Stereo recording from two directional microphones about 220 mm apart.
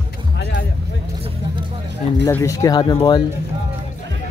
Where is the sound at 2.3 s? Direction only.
15° left (ahead or behind).